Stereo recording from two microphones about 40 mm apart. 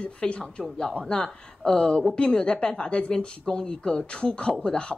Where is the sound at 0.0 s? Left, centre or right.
Left.